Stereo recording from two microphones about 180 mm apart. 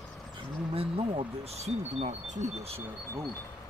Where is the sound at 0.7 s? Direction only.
30° right (ahead or behind).